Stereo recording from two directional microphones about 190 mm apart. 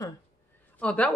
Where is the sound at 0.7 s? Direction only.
5° left (ahead or behind).